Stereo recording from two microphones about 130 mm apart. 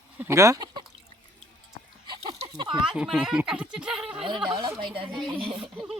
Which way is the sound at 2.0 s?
50° right (ahead or behind).